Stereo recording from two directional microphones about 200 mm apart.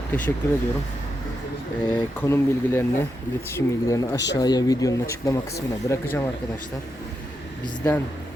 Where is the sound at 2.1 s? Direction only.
10° left (ahead or behind).